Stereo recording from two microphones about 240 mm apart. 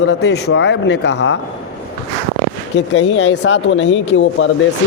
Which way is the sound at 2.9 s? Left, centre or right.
Left.